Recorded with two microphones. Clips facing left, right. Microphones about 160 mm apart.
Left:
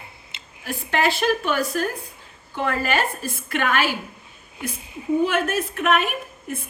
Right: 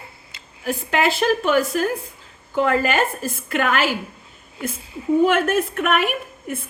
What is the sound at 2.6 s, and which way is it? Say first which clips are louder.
A woman's voice: right 4 dB; 45° right (ahead or behind).